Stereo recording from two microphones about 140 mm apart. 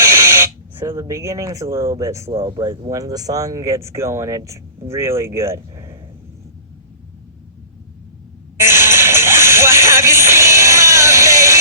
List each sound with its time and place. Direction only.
0.0 s a sound: 15° right (ahead or behind)
0.9 s speech: 25° right (ahead or behind)
8.5 s music: 20° right (ahead or behind)